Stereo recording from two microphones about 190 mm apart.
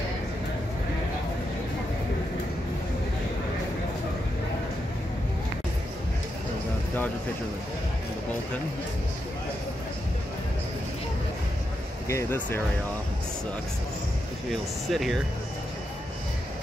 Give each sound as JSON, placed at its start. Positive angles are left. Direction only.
{"t": 12.1, "sound": "speech", "side_deg": 15}
{"t": 14.5, "sound": "speech", "side_deg": 0}